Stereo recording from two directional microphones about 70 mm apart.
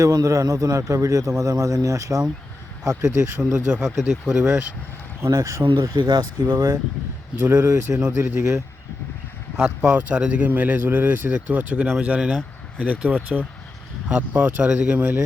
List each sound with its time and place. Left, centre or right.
0.0 s speech: right
3.5 s speech: centre
5.2 s speech: right
6.0 s speech: right
7.6 s speech: right
9.8 s speech: right
14.6 s speech: centre